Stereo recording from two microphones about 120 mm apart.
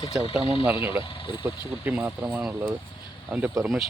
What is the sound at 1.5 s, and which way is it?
Speech, 10° right (ahead or behind).